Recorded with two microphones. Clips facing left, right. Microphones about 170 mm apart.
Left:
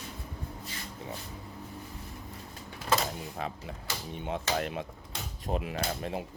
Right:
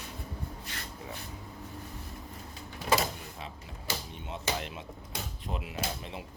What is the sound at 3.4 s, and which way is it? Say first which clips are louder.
Speech: left 7 dB; 55° left (ahead or behind).